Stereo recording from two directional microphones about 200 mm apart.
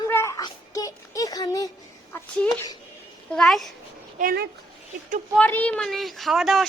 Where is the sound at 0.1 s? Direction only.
15° left (ahead or behind).